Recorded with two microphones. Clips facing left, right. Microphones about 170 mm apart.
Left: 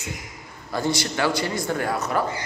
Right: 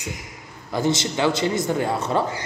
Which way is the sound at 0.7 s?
20° right (ahead or behind).